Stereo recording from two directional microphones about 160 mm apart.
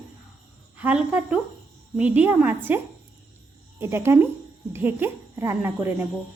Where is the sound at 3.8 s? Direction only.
15° right (ahead or behind).